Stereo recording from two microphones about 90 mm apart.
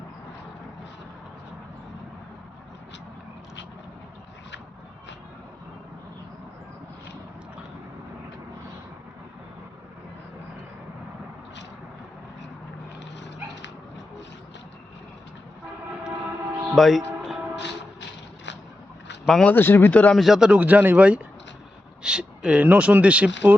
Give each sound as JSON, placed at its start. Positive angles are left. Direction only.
{"t": 16.7, "sound": "speech", "side_deg": 0}
{"t": 19.2, "sound": "speech", "side_deg": 5}
{"t": 19.5, "sound": "speech", "side_deg": 25}
{"t": 20.1, "sound": "speech", "side_deg": -5}
{"t": 20.5, "sound": "speech", "side_deg": -15}